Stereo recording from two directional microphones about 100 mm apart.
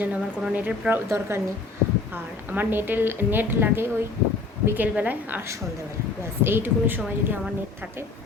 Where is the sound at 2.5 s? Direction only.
20° right (ahead or behind).